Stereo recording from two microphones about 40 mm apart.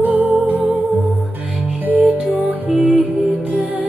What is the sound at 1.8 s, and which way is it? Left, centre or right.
Music, right.